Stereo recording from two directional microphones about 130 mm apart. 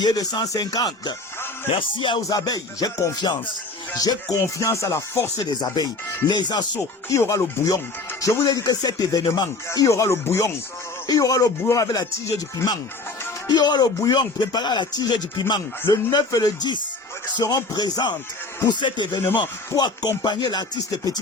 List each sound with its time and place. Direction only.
0.0 s music: 30° left (ahead or behind)
1.7 s speech: 40° left (ahead or behind)
2.2 s music: 30° left (ahead or behind)
5.4 s speech: 30° left (ahead or behind)
6.7 s music: 20° left (ahead or behind)
9.2 s speech: 35° left (ahead or behind)
9.6 s music: 25° left (ahead or behind)
13.5 s speech: 35° left (ahead or behind)
15.9 s music: 30° left (ahead or behind)
17.3 s speech: 30° left (ahead or behind)